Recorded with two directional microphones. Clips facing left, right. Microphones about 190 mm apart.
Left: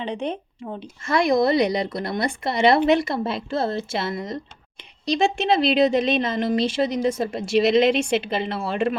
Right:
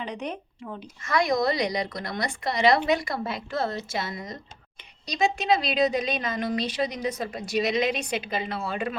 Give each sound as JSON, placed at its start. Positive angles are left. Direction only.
{"t": 0.0, "sound": "a woman's voice", "side_deg": 30}
{"t": 5.0, "sound": "a woman's voice", "side_deg": 25}